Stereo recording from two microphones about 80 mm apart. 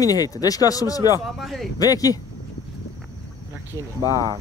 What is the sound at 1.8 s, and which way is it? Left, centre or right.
Speech, left.